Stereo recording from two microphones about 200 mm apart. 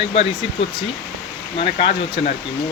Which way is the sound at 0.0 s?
30° left (ahead or behind).